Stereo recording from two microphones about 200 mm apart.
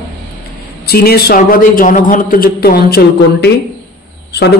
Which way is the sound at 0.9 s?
50° left (ahead or behind).